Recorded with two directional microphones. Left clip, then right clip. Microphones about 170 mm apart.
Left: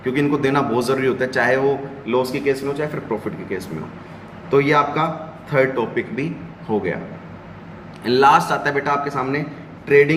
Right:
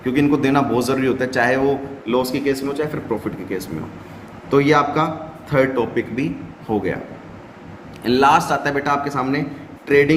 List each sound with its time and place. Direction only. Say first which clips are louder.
0.0 s a man's voice: right 1 dB; 60° right (ahead or behind)
6.7 s a man's voice: even; 60° right (ahead or behind)
8.0 s a man's voice: left 1 dB; 60° right (ahead or behind); by 10.2 s 90° right